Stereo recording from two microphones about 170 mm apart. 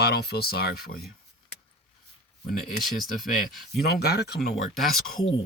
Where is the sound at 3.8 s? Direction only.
70° left (ahead or behind).